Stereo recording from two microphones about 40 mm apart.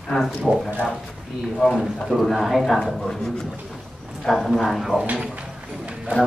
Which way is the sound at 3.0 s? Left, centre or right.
Centre.